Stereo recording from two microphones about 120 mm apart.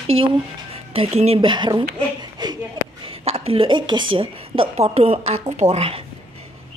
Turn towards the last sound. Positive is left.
turn(degrees=-55)  # may be behind; listen again after turning